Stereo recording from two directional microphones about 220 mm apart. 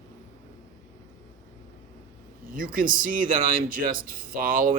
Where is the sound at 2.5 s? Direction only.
40° right (ahead or behind).